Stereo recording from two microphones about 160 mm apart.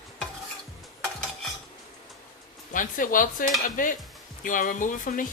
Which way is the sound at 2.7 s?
55° left (ahead or behind).